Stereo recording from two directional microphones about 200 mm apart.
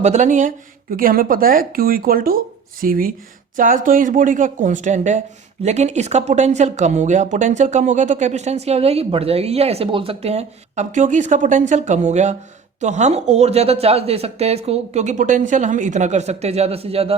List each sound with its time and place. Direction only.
0.0 s speech: 35° right (ahead or behind)